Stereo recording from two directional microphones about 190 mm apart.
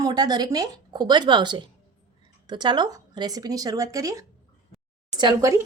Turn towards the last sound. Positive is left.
turn(degrees=-15)  # may be behind; listen again after turning